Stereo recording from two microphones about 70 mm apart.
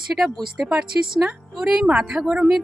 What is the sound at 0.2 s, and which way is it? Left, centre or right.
Speech, centre.